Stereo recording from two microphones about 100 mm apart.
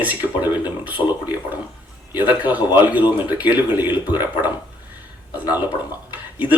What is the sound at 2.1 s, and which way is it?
A man's voice, 15° right (ahead or behind).